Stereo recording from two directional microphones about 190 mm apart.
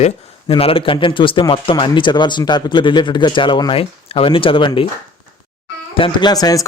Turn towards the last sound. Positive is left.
turn(degrees=20)  # may be behind; listen again after turning